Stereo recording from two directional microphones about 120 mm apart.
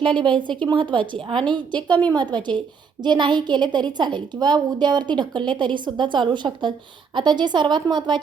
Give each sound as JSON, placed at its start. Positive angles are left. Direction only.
{"t": 0.0, "sound": "a woman's voice", "side_deg": -40}